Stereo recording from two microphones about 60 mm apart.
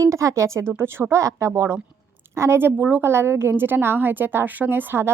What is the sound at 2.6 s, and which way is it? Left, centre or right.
Speech, right.